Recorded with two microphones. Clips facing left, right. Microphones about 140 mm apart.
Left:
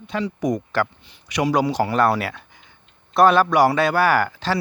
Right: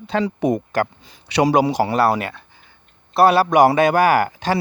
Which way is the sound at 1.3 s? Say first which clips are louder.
Right 5 dB; 80° right.